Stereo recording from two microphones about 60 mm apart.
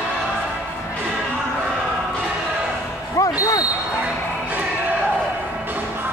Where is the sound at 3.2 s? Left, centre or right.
Left.